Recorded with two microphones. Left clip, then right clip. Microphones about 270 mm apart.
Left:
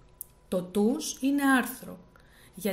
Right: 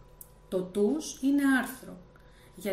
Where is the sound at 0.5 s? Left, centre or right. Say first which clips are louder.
Even; left.